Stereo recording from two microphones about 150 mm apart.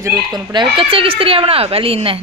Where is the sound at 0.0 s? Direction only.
25° right (ahead or behind).